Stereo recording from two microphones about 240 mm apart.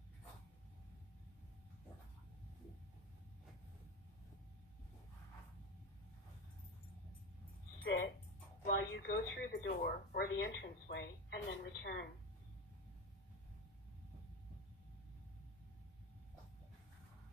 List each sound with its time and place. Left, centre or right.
7.8 s music: left
8.6 s speech: left